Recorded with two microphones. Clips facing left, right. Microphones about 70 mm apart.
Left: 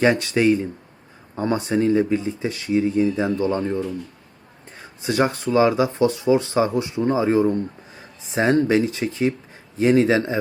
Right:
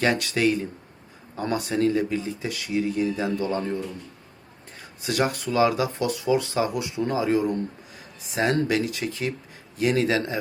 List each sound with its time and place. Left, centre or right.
0.0 s speech: left